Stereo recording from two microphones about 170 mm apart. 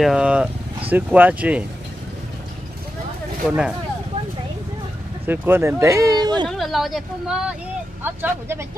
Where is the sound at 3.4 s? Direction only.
5° right (ahead or behind).